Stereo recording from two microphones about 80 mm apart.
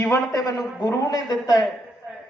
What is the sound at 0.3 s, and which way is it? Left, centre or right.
A woman's voice, left.